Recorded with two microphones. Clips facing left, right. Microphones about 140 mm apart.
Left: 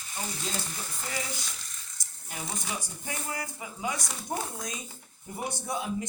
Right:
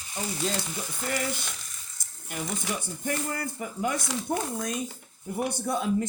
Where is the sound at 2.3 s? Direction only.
60° right (ahead or behind).